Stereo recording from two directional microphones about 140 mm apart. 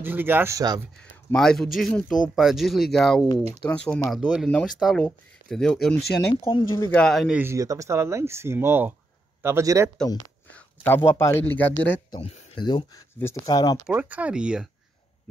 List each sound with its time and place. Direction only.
0.0 s speech: 15° right (ahead or behind)
1.3 s a man's voice: 5° left (ahead or behind)
4.1 s speech: 5° right (ahead or behind)
6.7 s speech: 20° left (ahead or behind)
7.0 s speech: centre (ahead or behind)
7.3 s speech: 20° right (ahead or behind)
10.5 s a sound: 15° left (ahead or behind)
11.1 s a man's voice: 20° left (ahead or behind)
12.5 s speech: 30° left (ahead or behind)
13.8 s speech: 10° right (ahead or behind)